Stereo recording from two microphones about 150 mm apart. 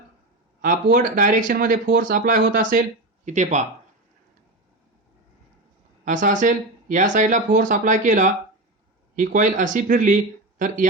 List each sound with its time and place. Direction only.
0.6 s speech: 65° right (ahead or behind)
3.2 s speech: 50° right (ahead or behind)
6.1 s speech: 60° right (ahead or behind)